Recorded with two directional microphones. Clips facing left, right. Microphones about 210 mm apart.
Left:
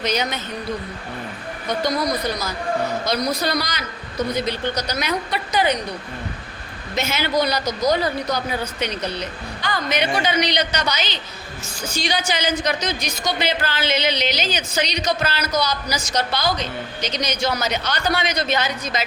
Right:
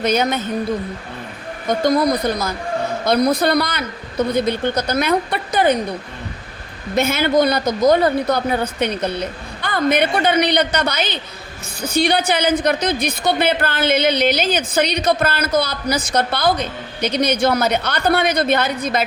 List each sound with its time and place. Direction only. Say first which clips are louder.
0.0 s a woman's voice: right 6 dB; 50° right (ahead or behind)
1.6 s a woman's voice: right 6 dB; 55° right (ahead or behind)
6.9 s a woman's voice: right 6 dB; 55° right (ahead or behind)